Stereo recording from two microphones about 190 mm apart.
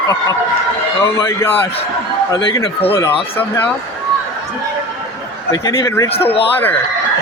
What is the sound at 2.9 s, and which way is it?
Speech, 15° left (ahead or behind).